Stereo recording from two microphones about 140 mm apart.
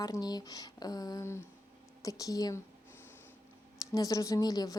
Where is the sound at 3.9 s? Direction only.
25° left (ahead or behind).